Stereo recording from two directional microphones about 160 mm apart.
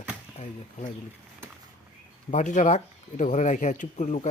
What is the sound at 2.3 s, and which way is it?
Speech, 50° left (ahead or behind).